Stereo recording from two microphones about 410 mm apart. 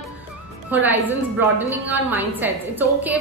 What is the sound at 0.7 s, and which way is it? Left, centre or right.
A woman's voice, centre.